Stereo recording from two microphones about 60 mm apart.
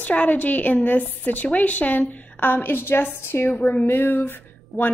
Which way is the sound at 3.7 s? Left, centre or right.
Left.